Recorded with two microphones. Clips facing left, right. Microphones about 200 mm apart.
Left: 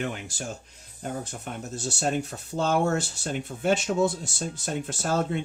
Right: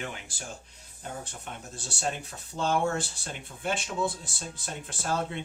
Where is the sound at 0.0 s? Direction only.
40° left (ahead or behind).